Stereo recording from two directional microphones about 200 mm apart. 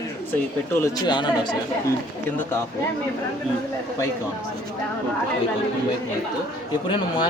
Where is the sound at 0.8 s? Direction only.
20° left (ahead or behind).